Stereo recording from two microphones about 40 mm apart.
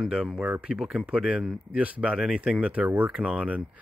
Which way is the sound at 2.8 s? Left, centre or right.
Right.